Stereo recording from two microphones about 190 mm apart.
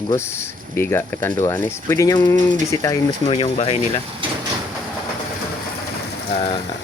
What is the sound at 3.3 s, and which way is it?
Speech, 30° left (ahead or behind).